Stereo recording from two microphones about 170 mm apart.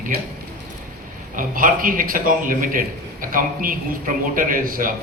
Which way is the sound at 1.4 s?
55° right (ahead or behind).